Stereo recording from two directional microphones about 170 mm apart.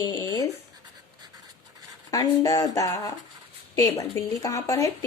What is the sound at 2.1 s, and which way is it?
Speech, 20° left (ahead or behind).